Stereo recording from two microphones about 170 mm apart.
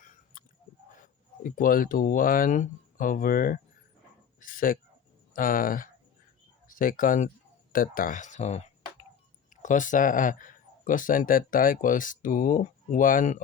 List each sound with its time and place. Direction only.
1.0 s speech: 50° left (ahead or behind)